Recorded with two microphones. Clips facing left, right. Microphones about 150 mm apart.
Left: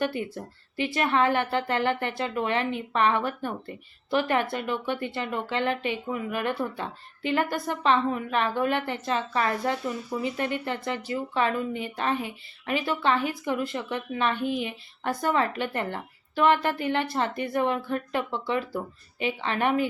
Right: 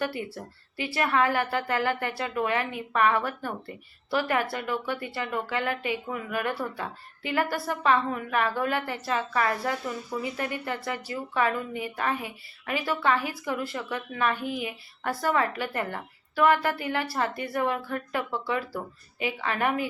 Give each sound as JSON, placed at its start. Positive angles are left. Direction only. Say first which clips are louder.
{"t": 0.0, "sound": "a woman's voice", "louder": "left 2 dB", "side_deg": 20}